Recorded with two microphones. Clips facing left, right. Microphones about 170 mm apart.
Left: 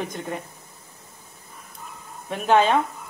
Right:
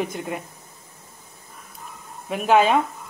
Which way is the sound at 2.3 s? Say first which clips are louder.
Right 1 dB; 5° right (ahead or behind).